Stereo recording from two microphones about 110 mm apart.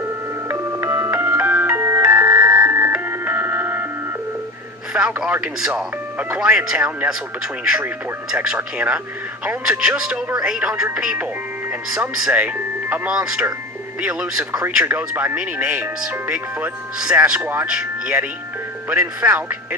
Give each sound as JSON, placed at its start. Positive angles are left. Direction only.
{"t": 0.5, "sound": "music", "side_deg": -20}
{"t": 4.9, "sound": "speech", "side_deg": -10}